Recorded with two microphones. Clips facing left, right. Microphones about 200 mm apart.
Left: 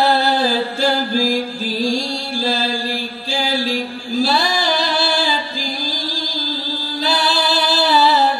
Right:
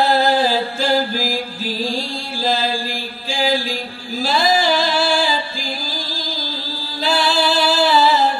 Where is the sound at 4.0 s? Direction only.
40° left (ahead or behind).